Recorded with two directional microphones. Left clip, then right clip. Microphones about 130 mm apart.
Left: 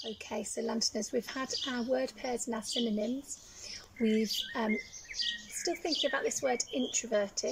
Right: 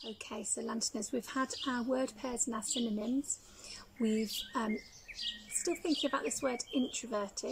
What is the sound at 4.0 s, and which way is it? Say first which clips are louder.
Speech: left 4 dB; 20° right (ahead or behind).